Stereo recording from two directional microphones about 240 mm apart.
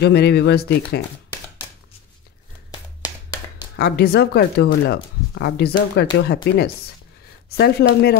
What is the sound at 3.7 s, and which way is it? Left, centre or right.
Speech, left.